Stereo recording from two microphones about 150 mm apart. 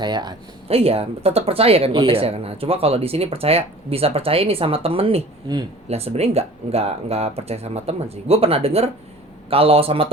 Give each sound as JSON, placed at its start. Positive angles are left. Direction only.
{"t": 0.0, "sound": "speech", "side_deg": -30}
{"t": 0.7, "sound": "speech", "side_deg": -40}